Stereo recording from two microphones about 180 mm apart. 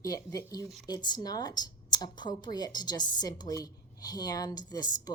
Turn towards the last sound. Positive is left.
turn(degrees=20)  # may be behind; listen again after turning